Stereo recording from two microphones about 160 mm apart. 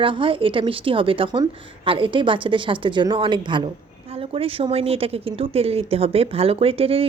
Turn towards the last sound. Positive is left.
turn(degrees=-35)  # may be behind; listen again after turning